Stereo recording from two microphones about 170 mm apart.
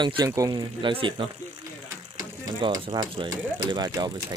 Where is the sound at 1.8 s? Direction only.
20° right (ahead or behind).